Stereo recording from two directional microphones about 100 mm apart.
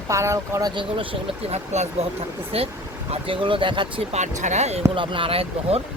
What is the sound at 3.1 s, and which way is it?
Speech, 60° right (ahead or behind).